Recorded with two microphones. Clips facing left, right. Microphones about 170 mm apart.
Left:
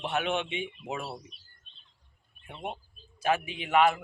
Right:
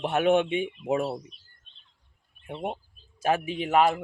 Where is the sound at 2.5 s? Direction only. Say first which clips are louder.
Right 6 dB; 30° right (ahead or behind).